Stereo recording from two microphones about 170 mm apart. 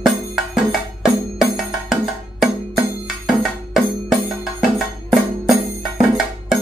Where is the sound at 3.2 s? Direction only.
Centre (ahead or behind).